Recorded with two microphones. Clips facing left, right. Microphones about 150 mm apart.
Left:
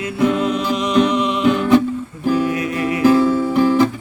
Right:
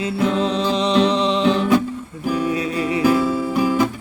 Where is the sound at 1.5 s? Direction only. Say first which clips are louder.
Left 4 dB; 10° left (ahead or behind).